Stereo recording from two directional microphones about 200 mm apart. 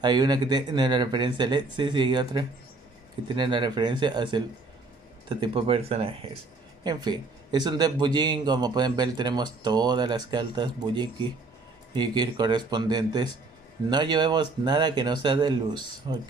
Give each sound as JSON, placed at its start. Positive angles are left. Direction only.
{"t": 0.0, "sound": "speech", "side_deg": -20}